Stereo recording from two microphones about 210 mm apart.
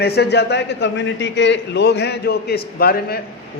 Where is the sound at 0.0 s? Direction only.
50° left (ahead or behind).